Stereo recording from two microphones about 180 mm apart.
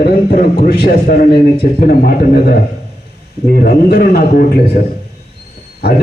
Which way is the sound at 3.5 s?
60° left (ahead or behind).